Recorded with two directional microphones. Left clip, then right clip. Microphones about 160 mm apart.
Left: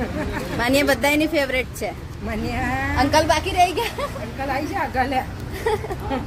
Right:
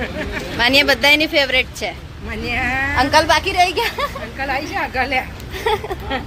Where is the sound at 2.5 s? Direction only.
25° left (ahead or behind).